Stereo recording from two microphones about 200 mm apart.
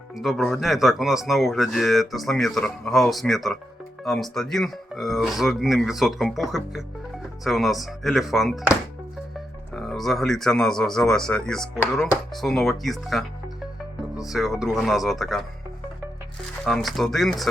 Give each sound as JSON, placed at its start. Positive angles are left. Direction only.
{"t": 0.2, "sound": "speech", "side_deg": 0}
{"t": 7.4, "sound": "speech", "side_deg": 0}
{"t": 9.7, "sound": "speech", "side_deg": 0}
{"t": 14.3, "sound": "speech", "side_deg": 0}
{"t": 16.6, "sound": "speech", "side_deg": 0}